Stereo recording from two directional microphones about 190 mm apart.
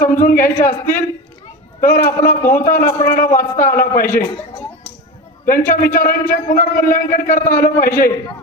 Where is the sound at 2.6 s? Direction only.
50° left (ahead or behind).